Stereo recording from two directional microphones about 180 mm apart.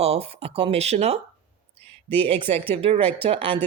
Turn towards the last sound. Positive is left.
turn(degrees=-30)  # may be behind; listen again after turning